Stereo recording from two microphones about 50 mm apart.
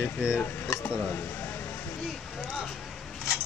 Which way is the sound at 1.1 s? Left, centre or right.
Left.